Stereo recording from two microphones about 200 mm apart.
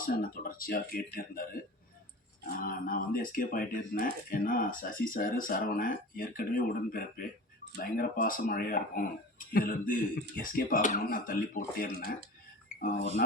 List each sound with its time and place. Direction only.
0.0 s speech: 45° left (ahead or behind)
2.6 s speech: 45° left (ahead or behind)